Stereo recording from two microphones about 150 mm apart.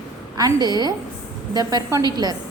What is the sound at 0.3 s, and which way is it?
A woman's voice, 25° right (ahead or behind).